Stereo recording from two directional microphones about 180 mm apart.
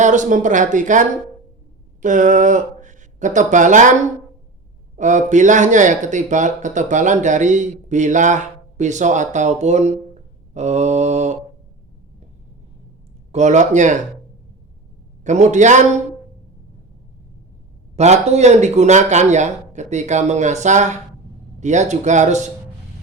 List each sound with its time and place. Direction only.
0.0 s speech: 45° right (ahead or behind)
4.9 s speech: 40° right (ahead or behind)
13.3 s speech: 40° right (ahead or behind)
15.2 s speech: 40° right (ahead or behind)
17.9 s speech: 40° right (ahead or behind)